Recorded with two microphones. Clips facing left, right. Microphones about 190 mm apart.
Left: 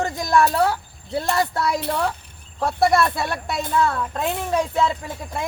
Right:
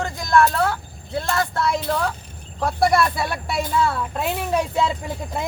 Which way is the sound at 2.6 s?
Centre (ahead or behind).